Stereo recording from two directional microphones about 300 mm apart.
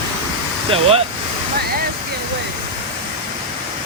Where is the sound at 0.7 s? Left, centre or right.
Centre.